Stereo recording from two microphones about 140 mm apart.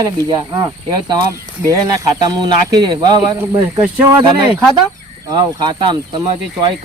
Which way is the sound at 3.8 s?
10° right (ahead or behind).